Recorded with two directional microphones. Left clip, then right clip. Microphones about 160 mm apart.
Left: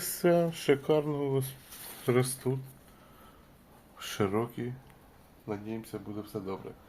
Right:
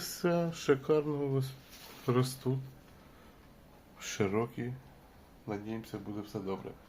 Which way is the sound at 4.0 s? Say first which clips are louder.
Left 2 dB; 15° left (ahead or behind).